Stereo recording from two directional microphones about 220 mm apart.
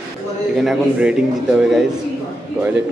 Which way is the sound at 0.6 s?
5° right (ahead or behind).